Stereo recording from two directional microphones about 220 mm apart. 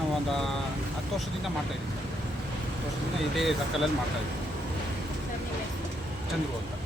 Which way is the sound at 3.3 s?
Centre (ahead or behind).